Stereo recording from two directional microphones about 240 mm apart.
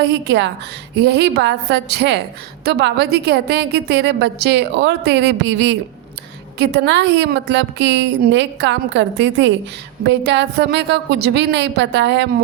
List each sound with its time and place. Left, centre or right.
0.0 s a woman's voice: right